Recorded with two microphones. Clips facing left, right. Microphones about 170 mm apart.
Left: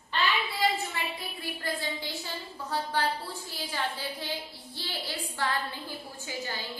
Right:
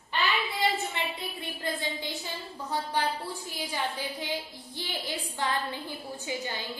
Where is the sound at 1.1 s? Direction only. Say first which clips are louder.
Even; 20° right (ahead or behind).